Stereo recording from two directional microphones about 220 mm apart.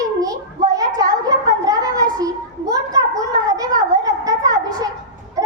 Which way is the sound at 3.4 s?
15° right (ahead or behind).